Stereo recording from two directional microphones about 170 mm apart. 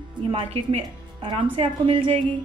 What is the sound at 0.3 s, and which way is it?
A woman's voice, 35° right (ahead or behind).